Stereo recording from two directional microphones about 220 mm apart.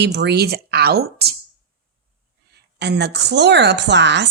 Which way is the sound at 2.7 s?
50° right (ahead or behind).